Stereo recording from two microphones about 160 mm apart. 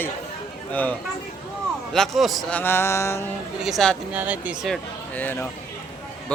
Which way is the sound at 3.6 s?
Centre (ahead or behind).